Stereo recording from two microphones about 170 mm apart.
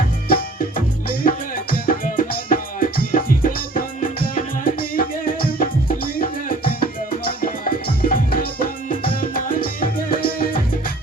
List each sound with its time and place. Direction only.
1.0 s music: 55° left (ahead or behind)
4.6 s music: 55° left (ahead or behind)
7.3 s music: 55° left (ahead or behind)